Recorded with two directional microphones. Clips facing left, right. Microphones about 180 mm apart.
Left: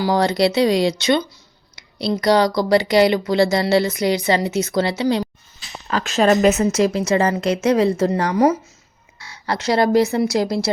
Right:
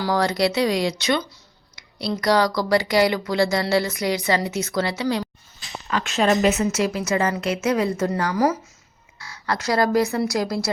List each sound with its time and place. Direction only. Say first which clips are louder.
0.0 s speech: left 4 dB; 20° left (ahead or behind)
5.9 s a woman's voice: left 4 dB; 40° left (ahead or behind)